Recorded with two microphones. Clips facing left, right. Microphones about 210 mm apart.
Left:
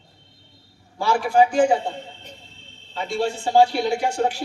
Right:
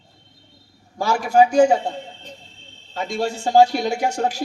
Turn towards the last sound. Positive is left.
turn(degrees=-40)  # may be behind; listen again after turning